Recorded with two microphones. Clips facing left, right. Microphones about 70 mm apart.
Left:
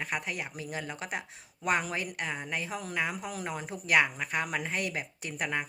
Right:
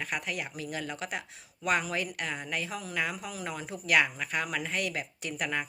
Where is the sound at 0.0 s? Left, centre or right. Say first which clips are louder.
Even; left.